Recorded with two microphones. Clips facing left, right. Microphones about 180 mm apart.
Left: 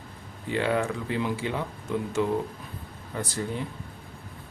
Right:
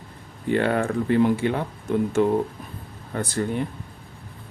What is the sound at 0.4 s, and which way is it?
Speech, 55° right (ahead or behind).